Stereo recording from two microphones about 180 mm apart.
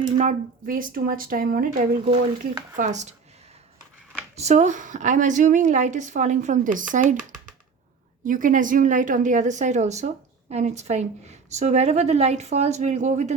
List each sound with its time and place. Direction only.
0.2 s a woman's voice: 45° right (ahead or behind)
2.0 s a woman's voice: 40° right (ahead or behind)
4.4 s a woman's voice: 40° right (ahead or behind)
8.2 s a woman's voice: 45° right (ahead or behind)